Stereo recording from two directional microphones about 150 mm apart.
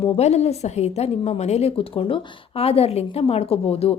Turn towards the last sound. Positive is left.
turn(degrees=40)  # may be behind; listen again after turning